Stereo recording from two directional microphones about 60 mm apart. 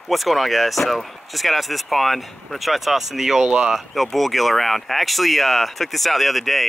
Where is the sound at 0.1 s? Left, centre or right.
Centre.